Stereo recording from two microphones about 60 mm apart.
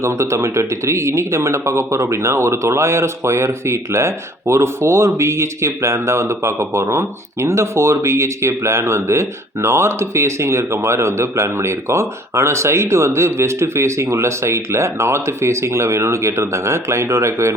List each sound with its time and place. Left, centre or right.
0.0 s speech: right